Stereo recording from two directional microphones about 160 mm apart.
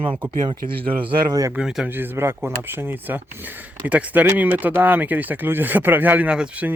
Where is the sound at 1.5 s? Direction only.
5° right (ahead or behind).